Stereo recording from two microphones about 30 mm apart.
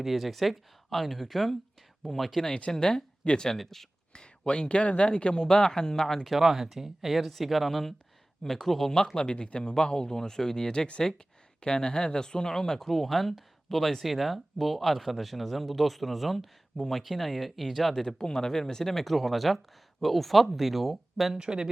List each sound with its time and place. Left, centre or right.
0.0 s speech: centre
2.7 s speech: centre
3.5 s speech: centre
4.1 s speech: left
6.3 s speech: centre
9.1 s speech: left
11.6 s speech: left
12.9 s speech: centre
18.0 s speech: left
19.1 s speech: centre
21.3 s speech: right